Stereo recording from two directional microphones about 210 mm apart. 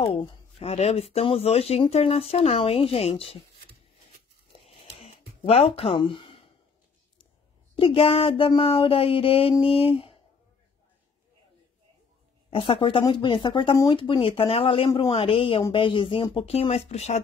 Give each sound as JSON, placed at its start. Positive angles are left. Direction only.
{"t": 0.0, "sound": "speech", "side_deg": 25}
{"t": 4.5, "sound": "a sound", "side_deg": 25}
{"t": 7.7, "sound": "speech", "side_deg": 25}
{"t": 12.4, "sound": "speech", "side_deg": 25}